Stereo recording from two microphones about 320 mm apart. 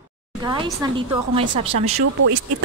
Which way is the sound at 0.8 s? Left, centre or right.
Centre.